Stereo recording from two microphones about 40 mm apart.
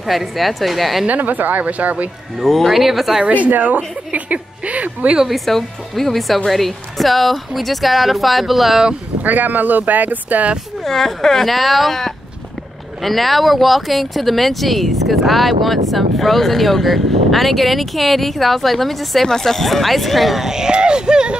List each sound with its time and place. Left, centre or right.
0.0 s speech: centre
1.0 s speech: right
2.4 s speech: centre
3.4 s a woman's voice: right
5.3 s speech: centre
9.2 s speech: right
10.8 s speech: centre
20.4 s speech: centre